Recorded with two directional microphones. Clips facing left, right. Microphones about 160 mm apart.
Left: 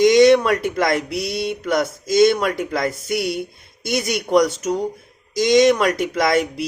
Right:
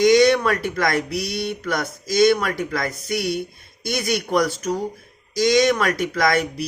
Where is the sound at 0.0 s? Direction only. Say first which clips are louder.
Left 3 dB; 25° left (ahead or behind).